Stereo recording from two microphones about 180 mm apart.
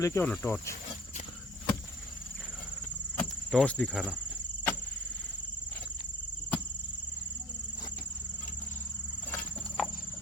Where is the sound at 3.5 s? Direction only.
5° left (ahead or behind).